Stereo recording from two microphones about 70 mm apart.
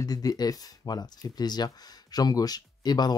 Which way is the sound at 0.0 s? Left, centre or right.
Left.